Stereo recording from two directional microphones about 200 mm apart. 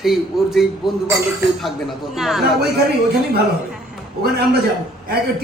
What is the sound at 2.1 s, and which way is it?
Speech, centre (ahead or behind).